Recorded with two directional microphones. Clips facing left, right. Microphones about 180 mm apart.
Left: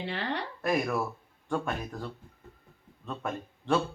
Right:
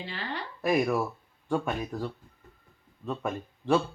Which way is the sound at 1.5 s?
5° right (ahead or behind).